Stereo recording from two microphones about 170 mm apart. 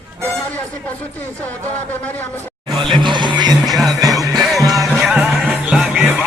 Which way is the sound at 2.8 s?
30° right (ahead or behind).